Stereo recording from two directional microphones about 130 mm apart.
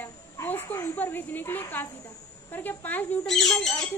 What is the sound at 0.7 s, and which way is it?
Speech, 15° left (ahead or behind).